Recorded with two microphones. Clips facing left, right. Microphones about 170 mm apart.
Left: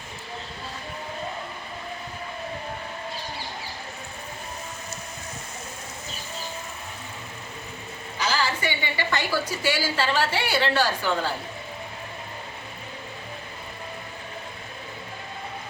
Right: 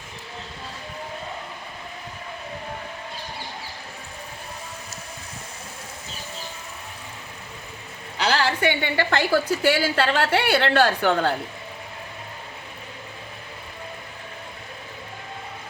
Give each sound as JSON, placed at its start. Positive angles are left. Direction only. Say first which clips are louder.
{"t": 8.2, "sound": "a woman's voice", "louder": "right 5 dB", "side_deg": -65}